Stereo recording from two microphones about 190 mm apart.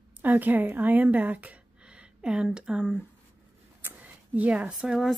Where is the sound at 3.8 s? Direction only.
10° right (ahead or behind).